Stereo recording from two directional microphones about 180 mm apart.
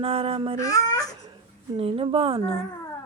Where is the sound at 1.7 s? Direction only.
30° right (ahead or behind).